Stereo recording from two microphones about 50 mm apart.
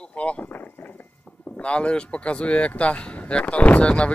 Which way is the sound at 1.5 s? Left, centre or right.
Left.